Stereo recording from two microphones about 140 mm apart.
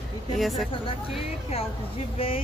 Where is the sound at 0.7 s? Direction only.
40° left (ahead or behind).